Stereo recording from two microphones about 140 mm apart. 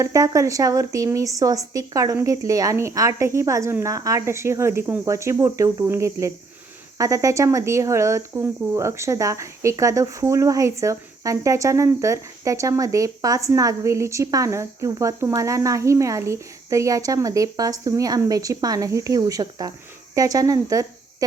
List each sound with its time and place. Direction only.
0.0 s speech: 25° right (ahead or behind)